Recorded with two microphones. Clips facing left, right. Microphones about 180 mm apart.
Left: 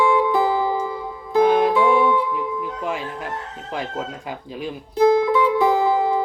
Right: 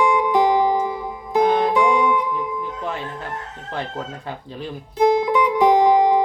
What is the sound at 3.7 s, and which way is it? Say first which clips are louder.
Speech: left 1 dB; 10° left (ahead or behind).